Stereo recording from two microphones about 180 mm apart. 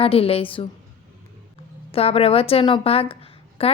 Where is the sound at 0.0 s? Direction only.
30° left (ahead or behind).